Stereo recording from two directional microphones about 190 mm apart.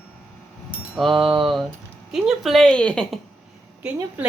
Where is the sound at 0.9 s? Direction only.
Centre (ahead or behind).